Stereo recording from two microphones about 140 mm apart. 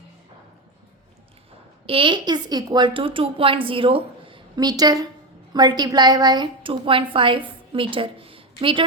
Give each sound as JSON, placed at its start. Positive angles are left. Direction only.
{"t": 1.9, "sound": "a woman's voice", "side_deg": -35}